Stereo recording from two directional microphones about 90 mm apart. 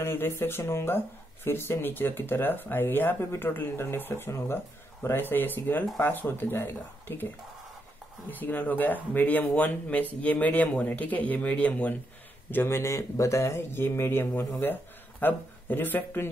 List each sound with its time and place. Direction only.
0.0 s speech: 25° left (ahead or behind)